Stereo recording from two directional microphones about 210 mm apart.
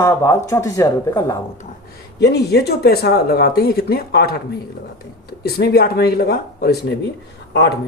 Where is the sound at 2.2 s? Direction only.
50° left (ahead or behind).